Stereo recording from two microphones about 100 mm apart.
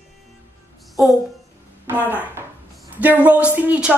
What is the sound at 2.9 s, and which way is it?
A woman's voice, 15° right (ahead or behind).